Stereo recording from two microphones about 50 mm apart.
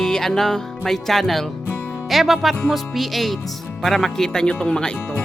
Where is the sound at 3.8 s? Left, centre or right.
Centre.